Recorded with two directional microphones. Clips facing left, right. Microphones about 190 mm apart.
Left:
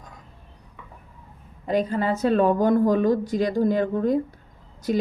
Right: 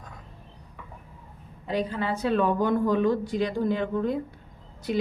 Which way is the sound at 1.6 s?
45° left (ahead or behind).